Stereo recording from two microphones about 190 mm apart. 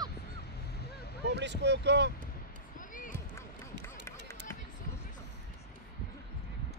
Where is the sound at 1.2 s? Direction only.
65° right (ahead or behind).